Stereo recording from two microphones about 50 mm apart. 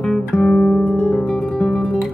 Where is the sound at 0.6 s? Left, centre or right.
Centre.